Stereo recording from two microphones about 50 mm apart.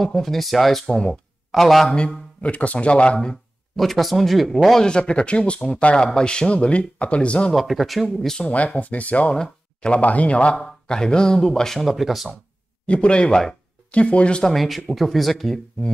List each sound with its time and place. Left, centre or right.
0.0 s speech: centre
0.8 s speech: centre
1.5 s speech: centre
1.9 s speech: centre
3.7 s speech: centre
4.8 s speech: centre
7.5 s speech: centre
8.4 s speech: left
9.3 s speech: centre
10.6 s speech: centre
11.9 s speech: centre
12.8 s speech: left
14.5 s speech: centre